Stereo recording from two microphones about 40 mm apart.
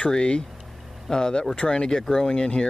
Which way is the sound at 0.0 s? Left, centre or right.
Left.